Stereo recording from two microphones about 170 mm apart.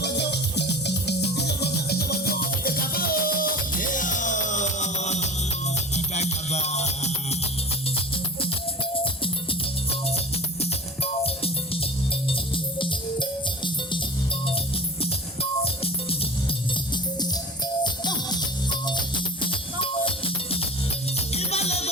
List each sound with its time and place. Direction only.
0.0 s music: 80° left; by 7.3 s 40° left (ahead or behind)
9.2 s music: 35° left (ahead or behind)
15.0 s music: 35° left (ahead or behind)
17.8 s music: 25° left (ahead or behind)